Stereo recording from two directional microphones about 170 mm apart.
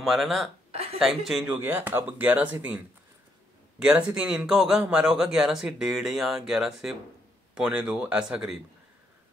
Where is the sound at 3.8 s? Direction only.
5° right (ahead or behind).